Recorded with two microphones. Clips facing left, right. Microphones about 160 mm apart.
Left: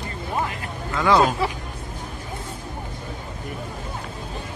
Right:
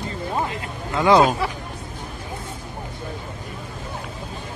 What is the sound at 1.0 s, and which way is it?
Speech, 15° right (ahead or behind).